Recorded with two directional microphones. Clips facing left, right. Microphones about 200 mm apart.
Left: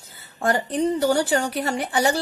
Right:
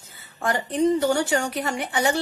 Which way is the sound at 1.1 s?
35° left (ahead or behind).